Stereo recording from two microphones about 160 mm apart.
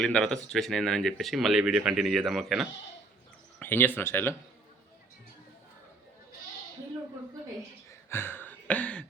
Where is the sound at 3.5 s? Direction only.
15° left (ahead or behind).